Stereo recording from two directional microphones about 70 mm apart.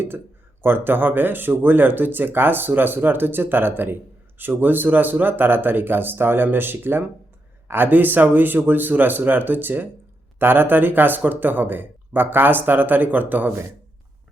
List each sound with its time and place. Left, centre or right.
0.6 s speech: right